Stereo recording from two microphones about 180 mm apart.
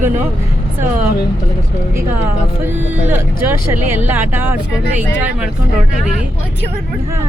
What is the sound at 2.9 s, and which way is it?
Speech, 10° right (ahead or behind).